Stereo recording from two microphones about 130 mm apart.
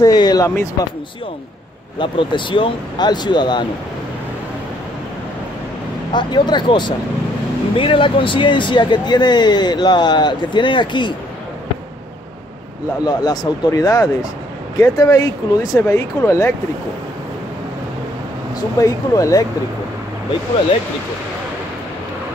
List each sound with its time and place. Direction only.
0.0 s speech: 30° left (ahead or behind)
2.0 s speech: 40° left (ahead or behind)
6.1 s speech: 35° left (ahead or behind)
13.0 s speech: 30° left (ahead or behind)
18.8 s speech: 25° left (ahead or behind)